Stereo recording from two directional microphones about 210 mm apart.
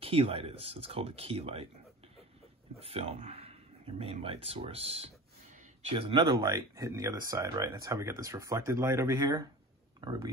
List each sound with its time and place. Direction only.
0.0 s speech: 25° right (ahead or behind)
2.8 s speech: 30° right (ahead or behind)